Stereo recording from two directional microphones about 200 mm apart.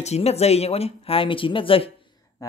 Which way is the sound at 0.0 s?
30° left (ahead or behind).